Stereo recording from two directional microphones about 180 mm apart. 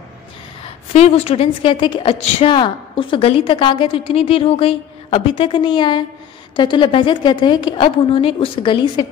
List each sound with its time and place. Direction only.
0.9 s a woman's voice: 35° left (ahead or behind)